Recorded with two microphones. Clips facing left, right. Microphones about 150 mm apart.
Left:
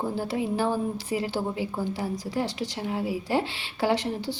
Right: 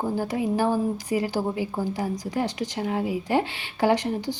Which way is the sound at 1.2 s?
15° right (ahead or behind).